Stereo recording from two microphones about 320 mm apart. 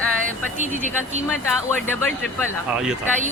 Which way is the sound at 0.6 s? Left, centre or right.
Right.